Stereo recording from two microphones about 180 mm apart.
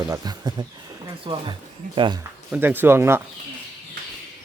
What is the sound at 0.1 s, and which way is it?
Speech, 20° right (ahead or behind).